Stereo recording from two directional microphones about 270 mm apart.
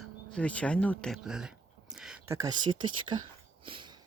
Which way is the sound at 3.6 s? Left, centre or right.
Centre.